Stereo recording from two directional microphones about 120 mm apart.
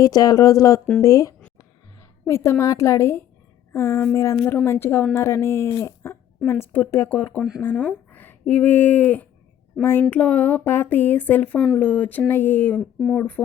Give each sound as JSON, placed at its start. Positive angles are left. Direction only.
{"t": 0.0, "sound": "speech", "side_deg": 30}
{"t": 1.5, "sound": "a sound", "side_deg": 25}
{"t": 3.7, "sound": "speech", "side_deg": 25}